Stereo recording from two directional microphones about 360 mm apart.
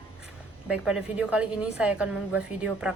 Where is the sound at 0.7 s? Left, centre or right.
Centre.